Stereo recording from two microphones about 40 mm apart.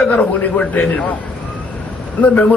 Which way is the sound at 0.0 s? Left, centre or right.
Left.